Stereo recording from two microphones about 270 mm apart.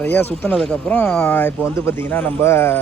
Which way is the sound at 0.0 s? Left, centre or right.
Centre.